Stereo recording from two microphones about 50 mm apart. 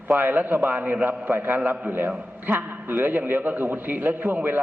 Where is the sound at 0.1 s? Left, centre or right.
Right.